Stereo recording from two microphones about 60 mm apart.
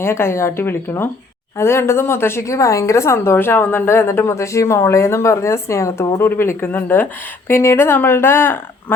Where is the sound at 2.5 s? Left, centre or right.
Left.